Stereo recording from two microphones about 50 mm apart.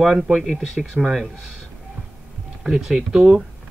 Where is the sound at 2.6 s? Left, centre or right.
Centre.